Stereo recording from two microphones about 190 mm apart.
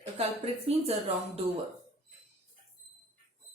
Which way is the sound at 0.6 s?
30° right (ahead or behind).